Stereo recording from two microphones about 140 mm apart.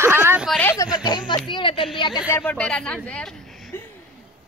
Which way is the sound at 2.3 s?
5° left (ahead or behind).